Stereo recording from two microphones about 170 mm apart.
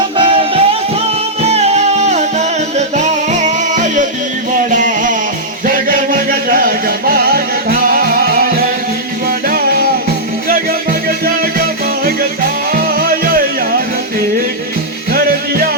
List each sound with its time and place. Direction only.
0.2 s music: 30° right (ahead or behind)
4.7 s a sound: 50° right (ahead or behind)
5.6 s music: 55° right (ahead or behind)
11.5 s music: 60° right (ahead or behind)
15.1 s music: 60° right (ahead or behind)